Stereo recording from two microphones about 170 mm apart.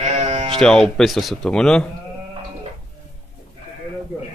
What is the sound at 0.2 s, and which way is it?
Music, 35° right (ahead or behind).